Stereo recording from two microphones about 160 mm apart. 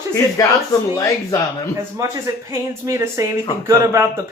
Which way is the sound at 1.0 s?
20° left (ahead or behind).